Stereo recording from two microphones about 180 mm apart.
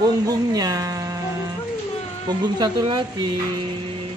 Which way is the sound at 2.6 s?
25° right (ahead or behind).